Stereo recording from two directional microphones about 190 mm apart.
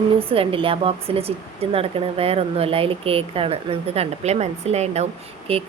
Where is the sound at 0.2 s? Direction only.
30° right (ahead or behind).